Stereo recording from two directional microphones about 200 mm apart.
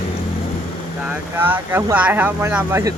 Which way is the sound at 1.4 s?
10° right (ahead or behind).